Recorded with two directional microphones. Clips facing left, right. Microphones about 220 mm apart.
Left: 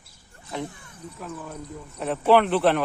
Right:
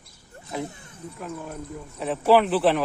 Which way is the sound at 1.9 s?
Centre (ahead or behind).